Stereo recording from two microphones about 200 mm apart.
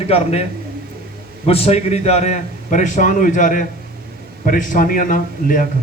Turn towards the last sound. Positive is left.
turn(degrees=40)  # may be behind; listen again after turning